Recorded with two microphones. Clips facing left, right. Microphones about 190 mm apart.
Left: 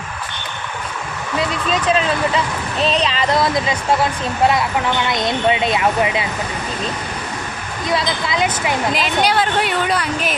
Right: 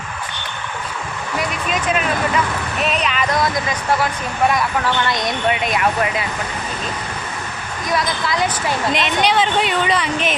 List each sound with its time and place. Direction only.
1.4 s speech: 30° left (ahead or behind)
7.9 s speech: 25° left (ahead or behind)
8.9 s speech: centre (ahead or behind)